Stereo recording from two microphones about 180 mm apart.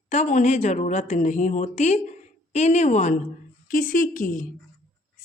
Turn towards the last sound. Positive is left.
turn(degrees=50)  # may be behind; listen again after turning